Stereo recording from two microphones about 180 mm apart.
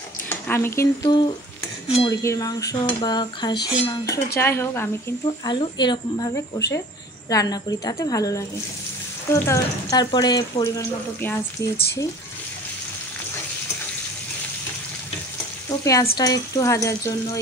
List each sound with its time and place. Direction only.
0.3 s speech: 10° left (ahead or behind)
2.0 s a sound: 20° left (ahead or behind)
4.4 s speech: 15° left (ahead or behind)
5.4 s a sound: 25° left (ahead or behind)
9.3 s speech: 20° left (ahead or behind)
15.7 s speech: 20° left (ahead or behind)